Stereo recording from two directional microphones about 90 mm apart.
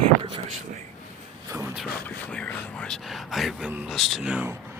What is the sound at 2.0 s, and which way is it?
Speech, 15° left (ahead or behind).